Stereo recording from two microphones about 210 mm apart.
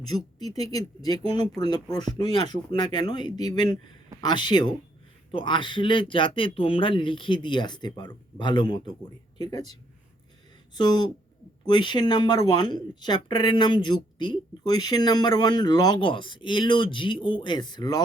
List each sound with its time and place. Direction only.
0.1 s speech: 20° left (ahead or behind)
10.8 s speech: 20° left (ahead or behind)